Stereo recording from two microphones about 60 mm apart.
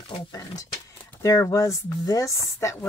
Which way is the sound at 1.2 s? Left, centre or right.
Left.